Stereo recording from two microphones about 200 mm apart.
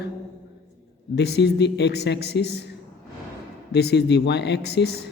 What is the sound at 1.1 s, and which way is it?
Speech, 55° left (ahead or behind).